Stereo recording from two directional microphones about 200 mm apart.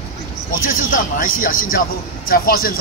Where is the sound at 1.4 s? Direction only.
45° left (ahead or behind).